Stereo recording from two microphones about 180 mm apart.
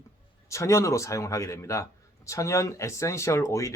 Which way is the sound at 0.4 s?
15° left (ahead or behind).